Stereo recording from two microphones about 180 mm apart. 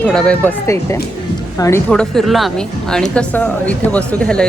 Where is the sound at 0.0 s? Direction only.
5° left (ahead or behind).